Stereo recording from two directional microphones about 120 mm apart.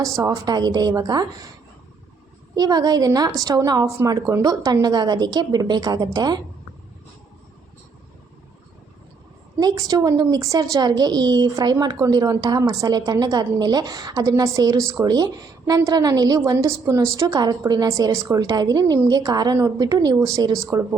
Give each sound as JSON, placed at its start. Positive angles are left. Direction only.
{"t": 0.2, "sound": "a woman's voice", "side_deg": -30}
{"t": 2.6, "sound": "a woman's voice", "side_deg": -35}
{"t": 9.6, "sound": "a woman's voice", "side_deg": -30}